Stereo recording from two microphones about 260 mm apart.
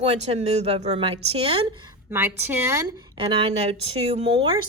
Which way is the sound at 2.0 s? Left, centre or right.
Centre.